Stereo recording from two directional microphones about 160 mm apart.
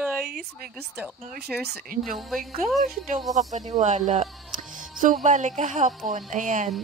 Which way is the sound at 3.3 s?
50° right (ahead or behind).